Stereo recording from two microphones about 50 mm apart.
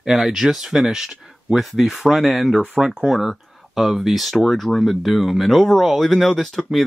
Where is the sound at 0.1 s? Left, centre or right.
Centre.